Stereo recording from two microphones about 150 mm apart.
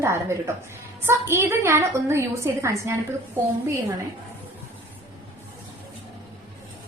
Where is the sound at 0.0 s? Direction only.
15° right (ahead or behind).